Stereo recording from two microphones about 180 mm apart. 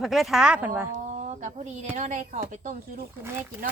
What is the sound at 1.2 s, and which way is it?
A woman's voice, 40° right (ahead or behind).